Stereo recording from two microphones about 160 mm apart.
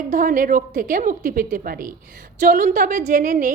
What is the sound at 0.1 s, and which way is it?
A woman's voice, 55° right (ahead or behind).